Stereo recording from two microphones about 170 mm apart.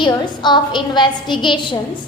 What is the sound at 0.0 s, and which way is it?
A woman's voice, 25° left (ahead or behind).